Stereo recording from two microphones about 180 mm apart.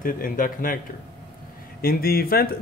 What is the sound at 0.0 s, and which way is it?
Speech, 50° left (ahead or behind).